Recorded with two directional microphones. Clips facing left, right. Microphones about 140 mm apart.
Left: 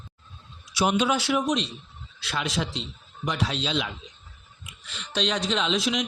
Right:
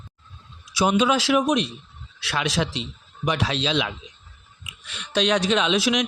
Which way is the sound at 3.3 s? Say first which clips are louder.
Right 4 dB; 85° right.